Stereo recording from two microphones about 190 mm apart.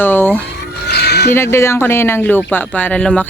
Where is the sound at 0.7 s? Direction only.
60° left (ahead or behind).